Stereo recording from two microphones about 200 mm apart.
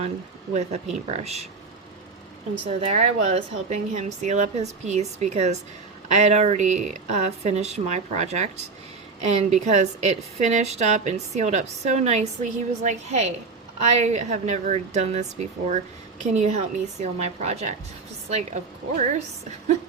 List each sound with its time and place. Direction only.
1.0 s a woman's voice: 35° right (ahead or behind)
2.6 s a woman's voice: 35° right (ahead or behind)